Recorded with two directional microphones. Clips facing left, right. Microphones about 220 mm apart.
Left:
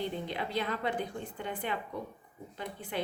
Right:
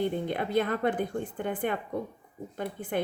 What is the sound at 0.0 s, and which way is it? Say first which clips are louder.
A woman's voice: right 6 dB; 50° right (ahead or behind).